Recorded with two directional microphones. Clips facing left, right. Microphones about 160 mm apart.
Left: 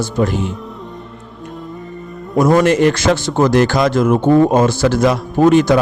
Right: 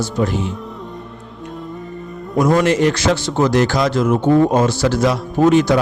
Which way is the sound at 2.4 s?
50° left (ahead or behind).